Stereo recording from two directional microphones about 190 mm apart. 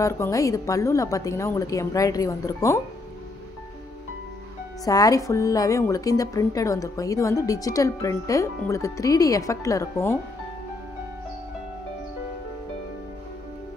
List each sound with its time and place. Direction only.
0.0 s a woman's voice: 15° left (ahead or behind)
4.8 s a woman's voice: 20° left (ahead or behind)